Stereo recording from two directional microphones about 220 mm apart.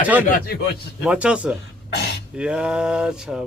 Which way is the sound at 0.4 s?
45° left (ahead or behind).